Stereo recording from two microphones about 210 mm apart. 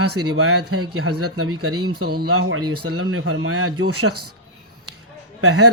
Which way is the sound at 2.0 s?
45° right (ahead or behind).